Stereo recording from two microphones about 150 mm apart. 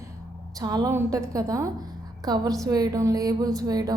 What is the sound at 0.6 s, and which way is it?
Speech, 25° right (ahead or behind).